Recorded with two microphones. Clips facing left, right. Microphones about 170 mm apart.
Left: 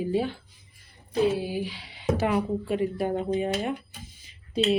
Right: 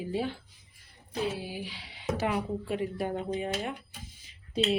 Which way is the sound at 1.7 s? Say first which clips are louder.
Left 6 dB; 55° left (ahead or behind).